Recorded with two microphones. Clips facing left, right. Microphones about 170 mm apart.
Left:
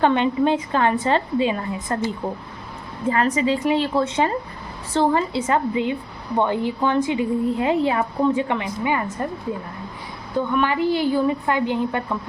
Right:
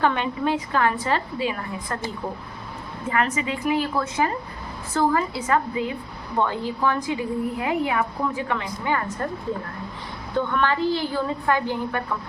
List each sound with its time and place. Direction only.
0.0 s a woman's voice: 25° left (ahead or behind)
3.1 s a woman's voice: 35° left (ahead or behind); by 9.0 s 15° left (ahead or behind)
10.3 s a woman's voice: 15° left (ahead or behind)